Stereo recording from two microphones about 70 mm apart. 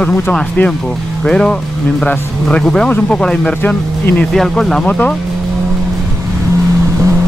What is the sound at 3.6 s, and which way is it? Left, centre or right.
Speech, left.